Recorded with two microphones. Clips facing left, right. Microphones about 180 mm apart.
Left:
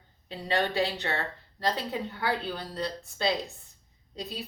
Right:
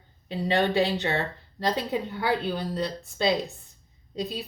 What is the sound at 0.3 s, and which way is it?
A woman's voice, 20° right (ahead or behind).